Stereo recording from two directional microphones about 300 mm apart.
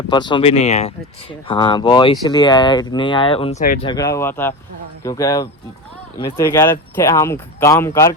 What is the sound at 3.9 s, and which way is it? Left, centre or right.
Speech, centre.